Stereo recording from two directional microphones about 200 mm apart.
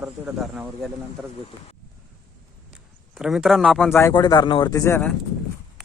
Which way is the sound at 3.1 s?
5° right (ahead or behind).